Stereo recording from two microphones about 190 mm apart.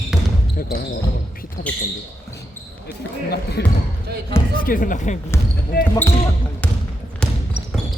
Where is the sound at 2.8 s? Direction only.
60° left (ahead or behind); by 5.2 s 40° left (ahead or behind).